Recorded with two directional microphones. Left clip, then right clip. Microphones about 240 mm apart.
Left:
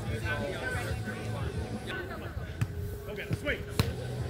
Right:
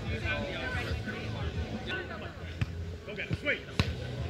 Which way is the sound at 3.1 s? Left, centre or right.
Left.